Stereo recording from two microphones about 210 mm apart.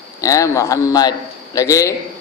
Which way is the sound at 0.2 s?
15° left (ahead or behind).